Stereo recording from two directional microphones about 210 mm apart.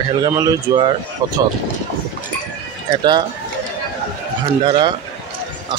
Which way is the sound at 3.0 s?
20° right (ahead or behind).